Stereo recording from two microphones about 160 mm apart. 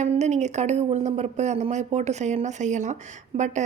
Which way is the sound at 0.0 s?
45° right (ahead or behind).